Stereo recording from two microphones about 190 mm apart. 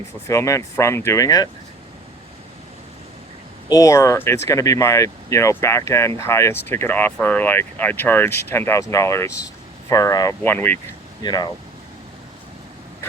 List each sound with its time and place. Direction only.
0.3 s speech: 15° left (ahead or behind)
3.7 s speech: 15° left (ahead or behind)
11.2 s speech: 20° left (ahead or behind)